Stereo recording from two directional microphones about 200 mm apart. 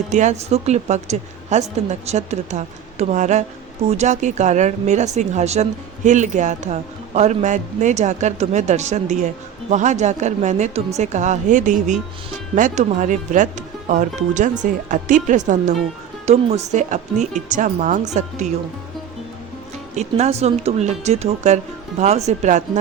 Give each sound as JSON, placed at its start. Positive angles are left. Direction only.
{"t": 0.1, "sound": "speech", "side_deg": -35}
{"t": 20.0, "sound": "speech", "side_deg": -35}